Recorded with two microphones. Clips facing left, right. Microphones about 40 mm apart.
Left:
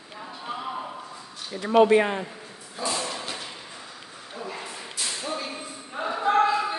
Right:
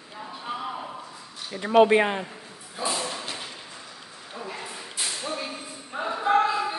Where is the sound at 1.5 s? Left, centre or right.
Centre.